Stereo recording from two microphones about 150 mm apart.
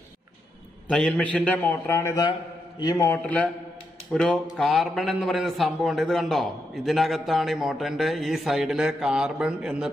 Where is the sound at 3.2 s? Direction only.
10° left (ahead or behind).